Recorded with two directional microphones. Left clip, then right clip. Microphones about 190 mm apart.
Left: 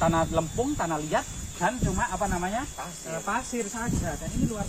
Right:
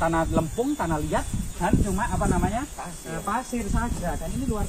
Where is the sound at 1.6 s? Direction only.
20° left (ahead or behind).